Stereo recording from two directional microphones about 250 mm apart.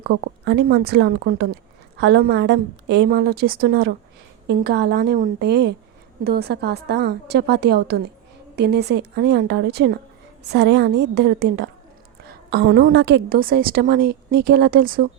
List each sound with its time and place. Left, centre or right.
0.5 s a woman's voice: right